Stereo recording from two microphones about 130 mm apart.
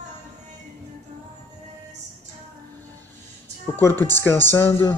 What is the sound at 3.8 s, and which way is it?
Speech, 20° left (ahead or behind).